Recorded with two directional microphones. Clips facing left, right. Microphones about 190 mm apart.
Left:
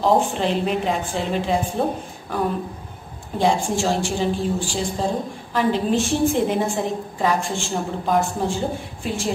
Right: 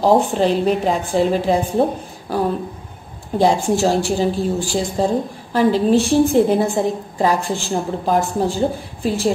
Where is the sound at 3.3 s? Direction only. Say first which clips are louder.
Right 4 dB; 40° right (ahead or behind).